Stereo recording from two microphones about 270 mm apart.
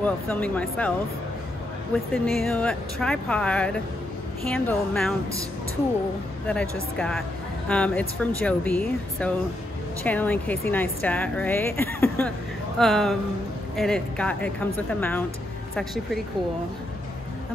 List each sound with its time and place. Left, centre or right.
0.0 s speech: centre
2.1 s speech: centre
6.4 s a woman's voice: centre